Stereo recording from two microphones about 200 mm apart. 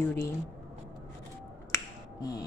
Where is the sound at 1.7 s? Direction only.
20° left (ahead or behind).